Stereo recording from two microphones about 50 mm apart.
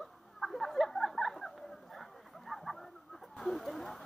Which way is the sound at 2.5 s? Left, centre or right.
Centre.